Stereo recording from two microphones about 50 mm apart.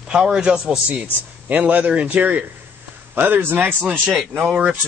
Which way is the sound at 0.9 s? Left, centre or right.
Right.